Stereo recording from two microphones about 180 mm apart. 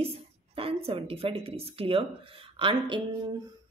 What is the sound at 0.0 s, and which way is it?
A woman's voice, 30° right (ahead or behind).